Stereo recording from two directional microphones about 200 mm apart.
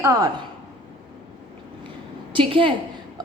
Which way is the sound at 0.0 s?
15° right (ahead or behind).